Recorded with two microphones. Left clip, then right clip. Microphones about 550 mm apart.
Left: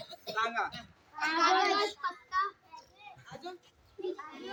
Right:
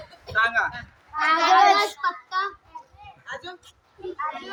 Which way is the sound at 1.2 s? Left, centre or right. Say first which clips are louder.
Right 11 dB; left.